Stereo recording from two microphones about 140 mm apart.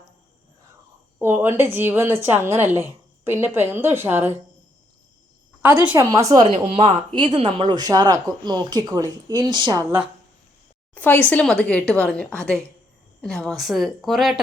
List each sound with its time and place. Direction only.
1.2 s a woman's voice: 15° right (ahead or behind)
5.8 s a woman's voice: 15° right (ahead or behind)
6.1 s speech: 25° right (ahead or behind)
6.4 s speech: 45° right (ahead or behind)
10.9 s a woman's voice: 10° left (ahead or behind)